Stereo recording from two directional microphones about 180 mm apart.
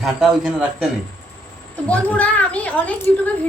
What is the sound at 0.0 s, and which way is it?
Speech, centre (ahead or behind).